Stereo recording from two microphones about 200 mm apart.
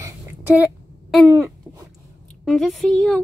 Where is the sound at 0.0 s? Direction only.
10° right (ahead or behind).